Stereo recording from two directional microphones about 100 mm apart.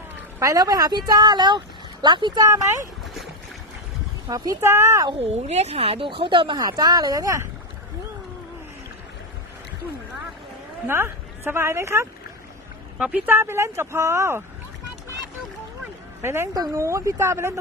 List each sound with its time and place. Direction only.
0.3 s speech: 35° right (ahead or behind)
4.3 s a woman's voice: 40° right (ahead or behind)
4.6 s speech: 30° right (ahead or behind)
5.1 s speech: 90° right; by 6.6 s 55° right (ahead or behind)
6.6 s a woman's voice: 45° right (ahead or behind)
10.8 s speech: 25° right (ahead or behind)
13.0 s speech: 10° right (ahead or behind)
16.2 s speech: 25° right (ahead or behind)